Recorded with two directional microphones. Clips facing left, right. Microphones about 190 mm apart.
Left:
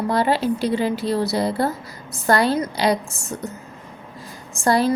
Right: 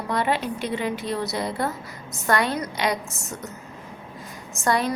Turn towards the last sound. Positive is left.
turn(degrees=30)  # may be behind; listen again after turning